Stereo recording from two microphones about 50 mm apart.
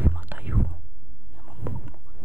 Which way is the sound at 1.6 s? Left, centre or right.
Right.